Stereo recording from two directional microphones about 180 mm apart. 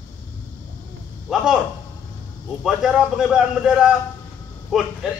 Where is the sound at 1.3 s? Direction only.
5° right (ahead or behind).